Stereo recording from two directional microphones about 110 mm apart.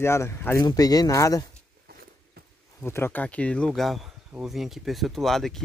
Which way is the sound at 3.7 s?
Centre (ahead or behind).